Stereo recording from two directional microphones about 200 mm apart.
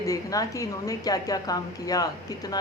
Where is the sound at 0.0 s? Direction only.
15° left (ahead or behind).